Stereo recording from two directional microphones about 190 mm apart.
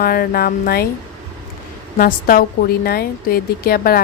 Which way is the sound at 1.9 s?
50° left (ahead or behind).